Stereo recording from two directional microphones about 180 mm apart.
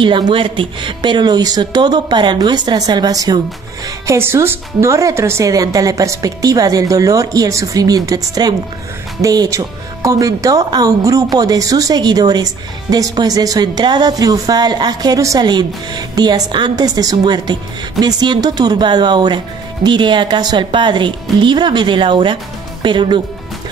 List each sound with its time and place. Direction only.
0.0 s speech: 30° right (ahead or behind)